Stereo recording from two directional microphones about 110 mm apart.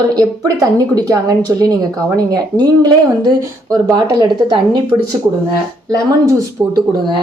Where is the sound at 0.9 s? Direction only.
30° right (ahead or behind).